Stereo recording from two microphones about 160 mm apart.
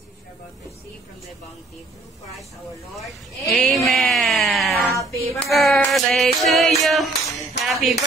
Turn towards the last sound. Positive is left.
turn(degrees=0)  # may be behind; listen again after turning